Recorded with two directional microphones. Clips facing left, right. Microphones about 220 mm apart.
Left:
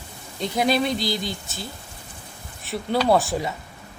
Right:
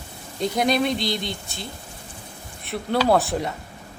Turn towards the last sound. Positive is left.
turn(degrees=0)  # may be behind; listen again after turning